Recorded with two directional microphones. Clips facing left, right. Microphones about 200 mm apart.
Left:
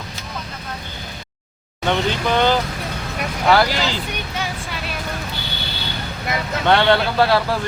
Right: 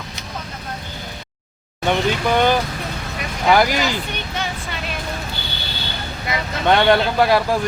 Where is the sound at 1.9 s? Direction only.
15° right (ahead or behind).